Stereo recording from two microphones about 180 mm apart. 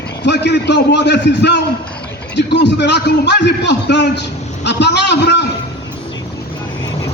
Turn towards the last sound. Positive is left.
turn(degrees=70)  # may be behind; listen again after turning